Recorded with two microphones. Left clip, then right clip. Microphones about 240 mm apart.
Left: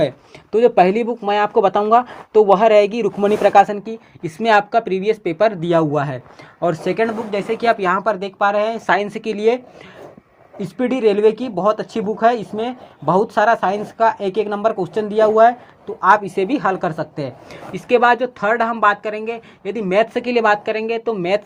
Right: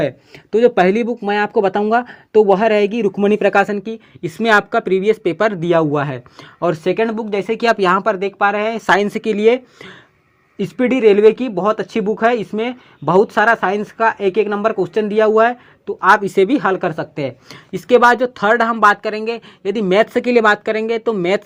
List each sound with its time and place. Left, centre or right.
0.5 s speech: right
10.6 s speech: right